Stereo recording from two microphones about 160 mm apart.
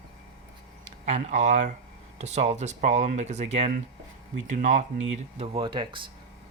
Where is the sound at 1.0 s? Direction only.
45° right (ahead or behind).